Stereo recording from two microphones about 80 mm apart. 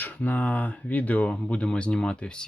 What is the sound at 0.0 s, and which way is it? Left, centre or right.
Speech, left.